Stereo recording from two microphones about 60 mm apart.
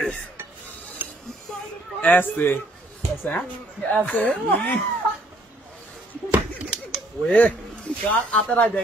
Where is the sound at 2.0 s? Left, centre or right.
Left.